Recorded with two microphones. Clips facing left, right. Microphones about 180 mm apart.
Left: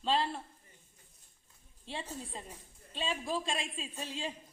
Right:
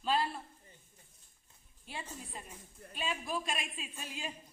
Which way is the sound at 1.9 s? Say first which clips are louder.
Left 4 dB; 30° left (ahead or behind).